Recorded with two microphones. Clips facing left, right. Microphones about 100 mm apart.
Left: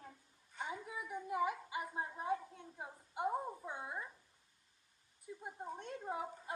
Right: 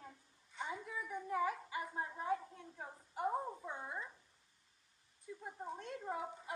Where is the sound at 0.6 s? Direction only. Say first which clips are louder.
Even; 10° left (ahead or behind).